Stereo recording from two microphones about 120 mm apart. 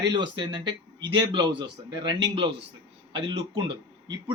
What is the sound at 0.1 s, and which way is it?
Speech, 40° right (ahead or behind).